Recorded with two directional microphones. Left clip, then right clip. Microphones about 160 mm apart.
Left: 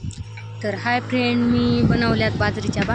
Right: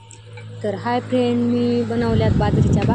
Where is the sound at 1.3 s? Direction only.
50° left (ahead or behind).